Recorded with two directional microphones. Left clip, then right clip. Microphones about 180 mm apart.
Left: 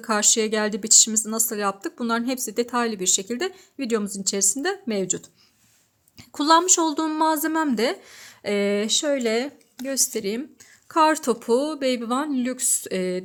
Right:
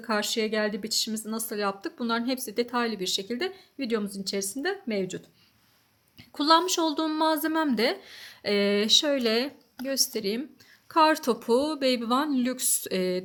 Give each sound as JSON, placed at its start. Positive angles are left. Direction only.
{"t": 0.0, "sound": "a woman's voice", "side_deg": 40}